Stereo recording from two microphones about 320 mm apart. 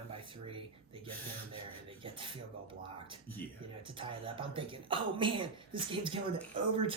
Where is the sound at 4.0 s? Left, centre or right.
Centre.